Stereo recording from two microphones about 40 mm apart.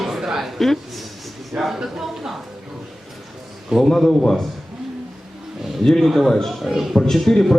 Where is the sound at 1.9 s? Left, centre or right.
Centre.